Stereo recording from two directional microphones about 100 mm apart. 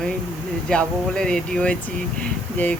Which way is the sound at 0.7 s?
10° left (ahead or behind).